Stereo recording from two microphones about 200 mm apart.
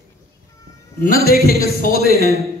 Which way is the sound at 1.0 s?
45° left (ahead or behind).